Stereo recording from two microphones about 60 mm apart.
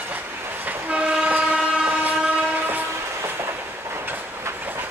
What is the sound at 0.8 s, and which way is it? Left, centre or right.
Train, centre.